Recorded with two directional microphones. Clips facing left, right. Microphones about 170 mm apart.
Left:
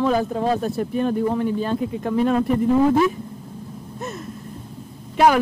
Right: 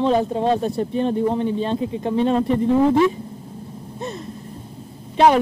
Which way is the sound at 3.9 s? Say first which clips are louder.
Right 2 dB; 25° right (ahead or behind).